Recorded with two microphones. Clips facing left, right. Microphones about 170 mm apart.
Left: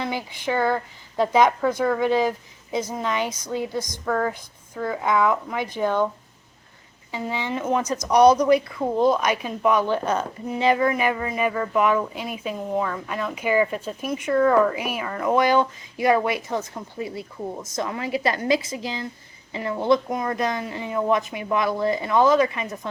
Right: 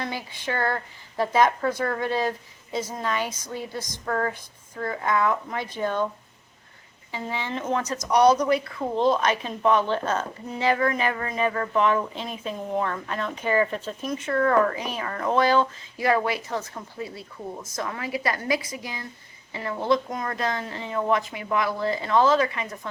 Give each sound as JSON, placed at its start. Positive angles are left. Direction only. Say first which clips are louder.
{"t": 0.1, "sound": "speech", "louder": "left 5 dB", "side_deg": 15}
{"t": 4.0, "sound": "speech", "louder": "left 2 dB", "side_deg": 0}
{"t": 5.0, "sound": "speech", "louder": "left 3 dB", "side_deg": 15}
{"t": 7.1, "sound": "speech", "louder": "left 3 dB", "side_deg": 15}